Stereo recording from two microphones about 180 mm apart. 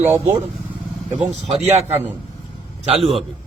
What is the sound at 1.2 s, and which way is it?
Speech, 35° right (ahead or behind).